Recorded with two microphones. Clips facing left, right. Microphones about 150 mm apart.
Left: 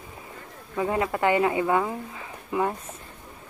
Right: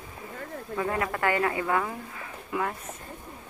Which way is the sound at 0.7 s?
20° left (ahead or behind).